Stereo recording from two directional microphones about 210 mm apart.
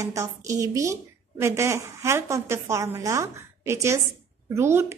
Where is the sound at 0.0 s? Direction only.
15° right (ahead or behind).